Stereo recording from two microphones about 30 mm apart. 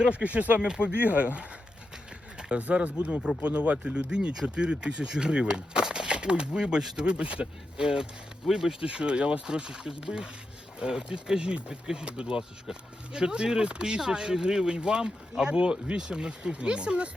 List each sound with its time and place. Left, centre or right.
0.1 s speech: right
0.4 s speech: right
2.6 s speech: right
3.4 s speech: right
7.8 s speech: right
8.8 s speech: right; by 14.8 s centre
14.8 s speech: right